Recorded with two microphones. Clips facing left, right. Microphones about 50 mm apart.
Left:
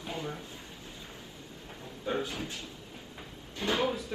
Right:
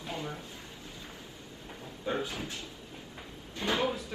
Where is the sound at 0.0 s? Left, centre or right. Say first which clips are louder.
Left 1 dB; centre.